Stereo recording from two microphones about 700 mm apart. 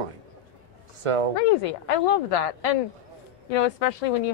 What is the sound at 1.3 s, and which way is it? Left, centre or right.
A woman's voice, left.